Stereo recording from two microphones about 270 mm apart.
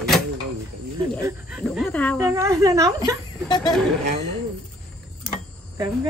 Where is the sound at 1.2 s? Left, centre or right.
Centre.